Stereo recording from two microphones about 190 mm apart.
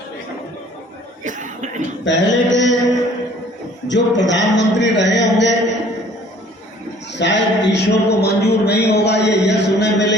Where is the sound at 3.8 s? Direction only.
70° left (ahead or behind).